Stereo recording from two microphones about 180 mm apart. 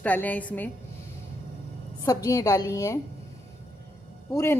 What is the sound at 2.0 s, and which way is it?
Speech, 20° left (ahead or behind).